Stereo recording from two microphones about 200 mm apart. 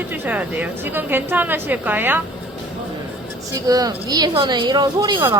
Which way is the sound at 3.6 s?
20° right (ahead or behind).